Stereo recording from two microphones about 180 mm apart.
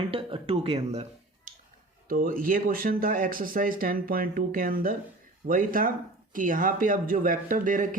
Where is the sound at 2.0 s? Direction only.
55° right (ahead or behind).